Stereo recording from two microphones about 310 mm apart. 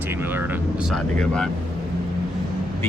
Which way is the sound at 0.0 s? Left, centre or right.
Centre.